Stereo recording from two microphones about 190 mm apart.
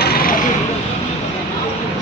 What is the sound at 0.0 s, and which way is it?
Vehicle, 50° left (ahead or behind).